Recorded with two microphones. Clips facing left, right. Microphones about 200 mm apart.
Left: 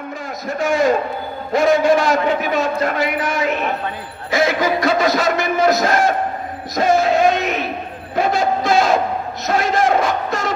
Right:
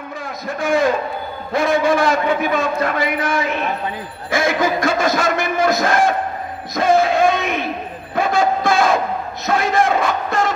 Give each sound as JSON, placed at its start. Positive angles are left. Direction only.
{"t": 0.6, "sound": "a man's voice", "side_deg": -55}
{"t": 8.2, "sound": "a sound", "side_deg": -50}
{"t": 9.5, "sound": "music", "side_deg": -55}